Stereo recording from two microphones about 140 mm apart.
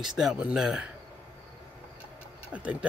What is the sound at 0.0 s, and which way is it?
Speech, 5° right (ahead or behind).